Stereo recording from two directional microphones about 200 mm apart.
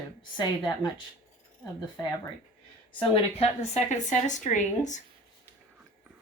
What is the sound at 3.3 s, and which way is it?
A woman's voice, 30° left (ahead or behind).